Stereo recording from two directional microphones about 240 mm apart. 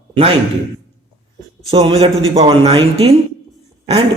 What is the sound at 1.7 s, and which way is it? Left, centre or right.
A man's voice, right.